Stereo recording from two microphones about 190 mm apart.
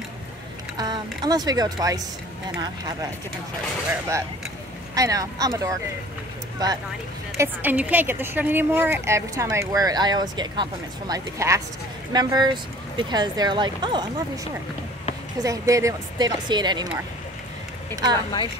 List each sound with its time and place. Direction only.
0.7 s speech: 20° right (ahead or behind)
4.9 s a woman's voice: 20° right (ahead or behind)
7.3 s a woman's voice: 10° right (ahead or behind)
15.4 s speech: 15° right (ahead or behind)